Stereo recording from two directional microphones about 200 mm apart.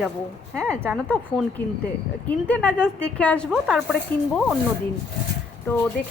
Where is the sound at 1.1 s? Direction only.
5° left (ahead or behind).